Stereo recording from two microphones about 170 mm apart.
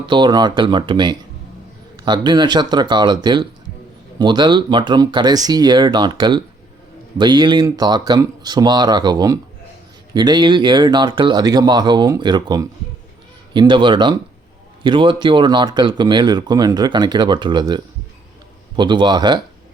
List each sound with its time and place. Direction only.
0.1 s speech: 25° right (ahead or behind)